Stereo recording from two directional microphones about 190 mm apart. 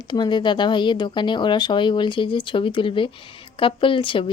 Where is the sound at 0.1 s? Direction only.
25° left (ahead or behind).